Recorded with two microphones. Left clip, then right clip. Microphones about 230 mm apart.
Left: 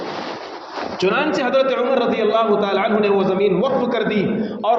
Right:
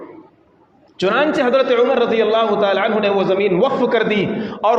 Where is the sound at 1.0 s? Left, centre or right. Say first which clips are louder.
Right 3 dB; right.